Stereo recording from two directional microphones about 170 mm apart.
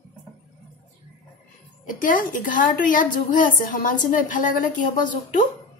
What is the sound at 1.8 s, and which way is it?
A woman's voice, 50° left (ahead or behind).